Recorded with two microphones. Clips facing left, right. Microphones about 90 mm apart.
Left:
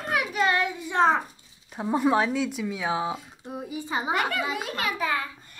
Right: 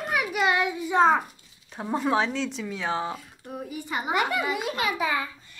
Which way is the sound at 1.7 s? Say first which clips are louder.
Left 2 dB; 5° left (ahead or behind).